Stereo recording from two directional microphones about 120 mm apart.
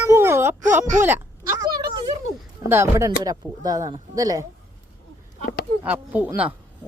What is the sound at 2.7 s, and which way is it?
Speech, 25° right (ahead or behind).